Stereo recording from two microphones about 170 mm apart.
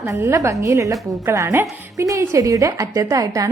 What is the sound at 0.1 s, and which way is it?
A woman's voice, 15° right (ahead or behind).